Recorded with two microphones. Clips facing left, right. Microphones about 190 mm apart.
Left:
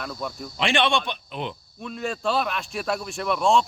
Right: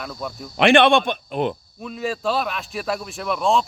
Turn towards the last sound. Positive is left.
turn(degrees=0)  # may be behind; listen again after turning